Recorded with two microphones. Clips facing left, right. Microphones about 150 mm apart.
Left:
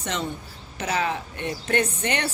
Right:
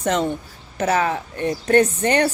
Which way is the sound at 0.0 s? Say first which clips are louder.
Right 9 dB; 50° right (ahead or behind).